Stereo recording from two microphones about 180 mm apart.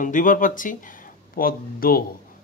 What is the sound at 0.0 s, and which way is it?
Speech, 45° left (ahead or behind).